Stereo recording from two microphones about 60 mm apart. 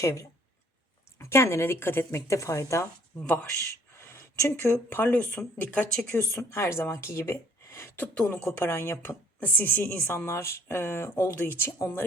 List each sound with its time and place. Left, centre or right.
0.0 s speech: left
1.2 s speech: left
3.9 s a sound: left
4.9 s a woman's voice: left
6.1 s speech: left
7.9 s speech: left
8.5 s a woman's voice: left
10.3 s speech: left
11.1 s a woman's voice: left